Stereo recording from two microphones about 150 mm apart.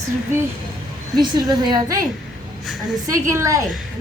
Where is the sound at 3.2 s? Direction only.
20° right (ahead or behind).